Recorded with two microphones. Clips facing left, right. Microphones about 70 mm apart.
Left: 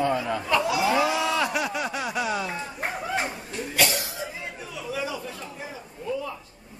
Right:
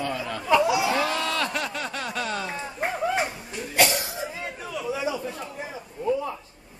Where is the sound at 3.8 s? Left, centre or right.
Right.